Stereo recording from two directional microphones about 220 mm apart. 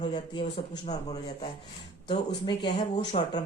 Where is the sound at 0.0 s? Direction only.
25° left (ahead or behind).